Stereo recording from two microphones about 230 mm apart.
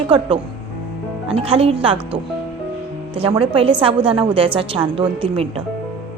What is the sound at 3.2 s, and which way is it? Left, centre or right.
A woman's voice, right.